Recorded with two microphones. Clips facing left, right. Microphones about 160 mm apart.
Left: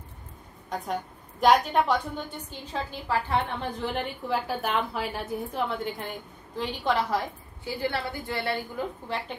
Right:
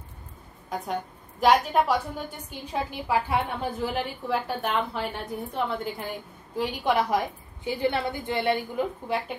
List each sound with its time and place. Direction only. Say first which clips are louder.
0.7 s a woman's voice: right 1 dB; centre (ahead or behind)
6.6 s a woman's voice: right 2 dB; 10° right (ahead or behind)